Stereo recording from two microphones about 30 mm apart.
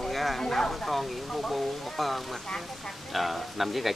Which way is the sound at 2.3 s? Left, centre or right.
Centre.